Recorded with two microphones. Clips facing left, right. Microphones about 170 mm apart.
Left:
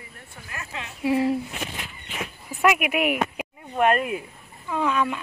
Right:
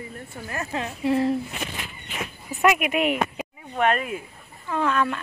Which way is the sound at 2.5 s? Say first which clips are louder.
Right 1 dB; centre (ahead or behind).